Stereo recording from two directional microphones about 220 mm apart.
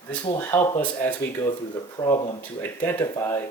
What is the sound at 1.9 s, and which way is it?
Speech, 20° left (ahead or behind).